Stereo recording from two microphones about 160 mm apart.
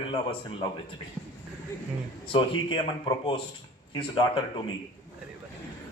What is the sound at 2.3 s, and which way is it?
A man's voice, 30° left (ahead or behind).